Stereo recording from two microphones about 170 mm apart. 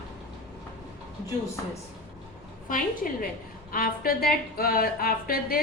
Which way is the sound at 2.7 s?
55° left (ahead or behind).